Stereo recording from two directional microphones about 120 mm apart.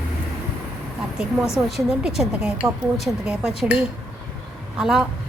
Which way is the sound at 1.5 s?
5° right (ahead or behind).